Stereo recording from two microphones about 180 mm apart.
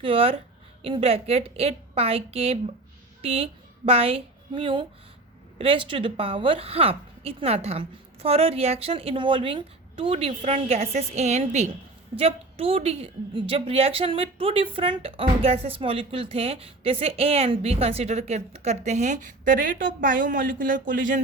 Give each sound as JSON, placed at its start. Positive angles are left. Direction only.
{"t": 0.0, "sound": "a woman's voice", "side_deg": -30}